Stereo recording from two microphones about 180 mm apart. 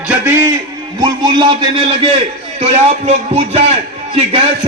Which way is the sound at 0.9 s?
20° right (ahead or behind).